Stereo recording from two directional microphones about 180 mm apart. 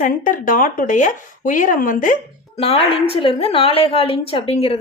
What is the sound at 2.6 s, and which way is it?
A woman's voice, 30° left (ahead or behind).